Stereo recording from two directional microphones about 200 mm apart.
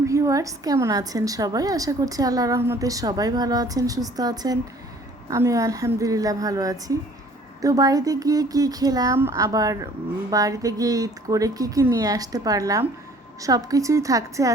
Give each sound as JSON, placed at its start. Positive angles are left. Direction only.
{"t": 0.1, "sound": "a woman's voice", "side_deg": -15}